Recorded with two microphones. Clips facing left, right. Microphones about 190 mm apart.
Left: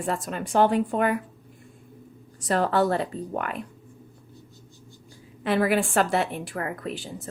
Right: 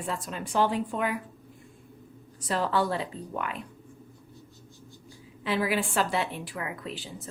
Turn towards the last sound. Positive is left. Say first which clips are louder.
# left 5 dB
turn(degrees=50)  # may be behind; listen again after turning